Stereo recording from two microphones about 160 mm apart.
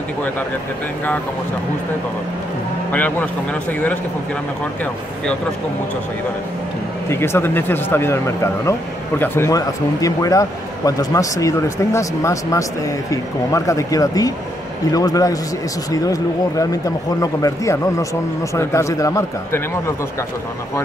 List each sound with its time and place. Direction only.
2.9 s speech: 10° left (ahead or behind)
7.1 s a man's voice: 15° left (ahead or behind)